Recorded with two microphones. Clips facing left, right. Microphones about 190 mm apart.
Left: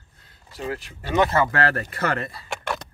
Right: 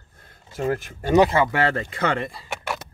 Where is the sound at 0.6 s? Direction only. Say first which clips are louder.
Right 6 dB; 50° right (ahead or behind).